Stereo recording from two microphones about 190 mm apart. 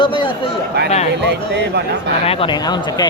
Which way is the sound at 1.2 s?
65° right (ahead or behind).